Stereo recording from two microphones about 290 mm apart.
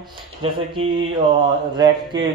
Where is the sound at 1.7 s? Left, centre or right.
Centre.